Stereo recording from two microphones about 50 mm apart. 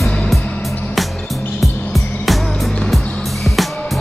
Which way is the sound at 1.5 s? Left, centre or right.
Centre.